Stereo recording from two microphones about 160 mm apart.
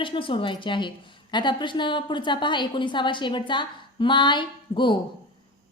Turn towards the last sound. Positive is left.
turn(degrees=30)  # may be behind; listen again after turning